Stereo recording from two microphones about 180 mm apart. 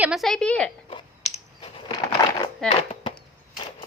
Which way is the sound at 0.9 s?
30° left (ahead or behind).